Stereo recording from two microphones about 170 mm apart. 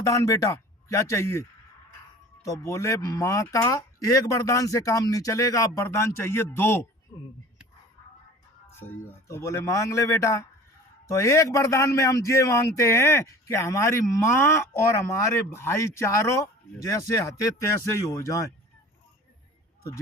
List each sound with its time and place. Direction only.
0.0 s speech: 20° left (ahead or behind)
8.7 s speech: 15° left (ahead or behind)